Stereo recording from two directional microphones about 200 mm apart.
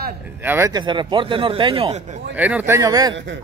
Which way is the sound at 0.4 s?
10° right (ahead or behind).